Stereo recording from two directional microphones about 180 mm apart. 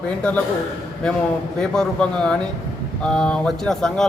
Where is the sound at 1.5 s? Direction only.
5° left (ahead or behind).